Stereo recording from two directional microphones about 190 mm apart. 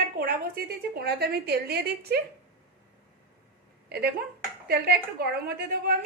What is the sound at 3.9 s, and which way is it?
Speech, 55° right (ahead or behind).